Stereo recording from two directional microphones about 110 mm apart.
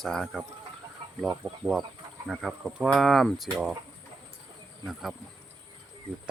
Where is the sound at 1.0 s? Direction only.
55° right (ahead or behind).